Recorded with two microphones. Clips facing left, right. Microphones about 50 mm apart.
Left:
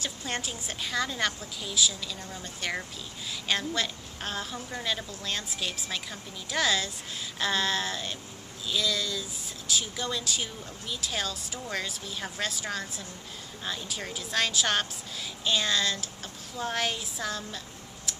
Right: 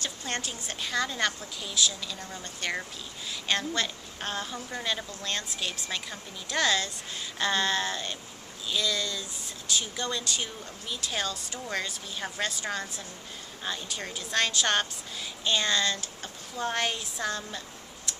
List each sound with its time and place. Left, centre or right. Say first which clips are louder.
0.0 s speech: even; centre